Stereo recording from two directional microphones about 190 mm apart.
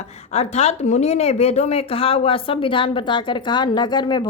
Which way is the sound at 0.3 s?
35° left (ahead or behind).